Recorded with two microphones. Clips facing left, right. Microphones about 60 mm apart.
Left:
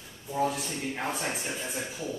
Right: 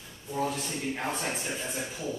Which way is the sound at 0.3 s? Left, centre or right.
Centre.